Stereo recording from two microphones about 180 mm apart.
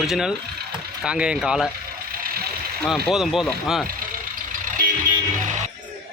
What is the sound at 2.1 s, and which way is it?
Vehicle, 55° right (ahead or behind).